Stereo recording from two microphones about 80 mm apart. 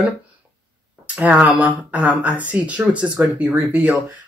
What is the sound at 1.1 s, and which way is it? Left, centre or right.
Speech, centre.